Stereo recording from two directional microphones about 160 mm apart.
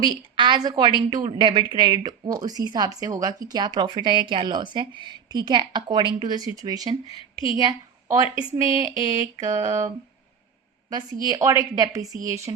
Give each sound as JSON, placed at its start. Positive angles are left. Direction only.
{"t": 0.1, "sound": "a woman's voice", "side_deg": -30}
{"t": 10.8, "sound": "a woman's voice", "side_deg": -25}